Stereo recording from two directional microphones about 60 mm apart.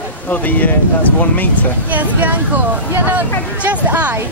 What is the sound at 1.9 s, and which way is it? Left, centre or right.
A woman's voice, right.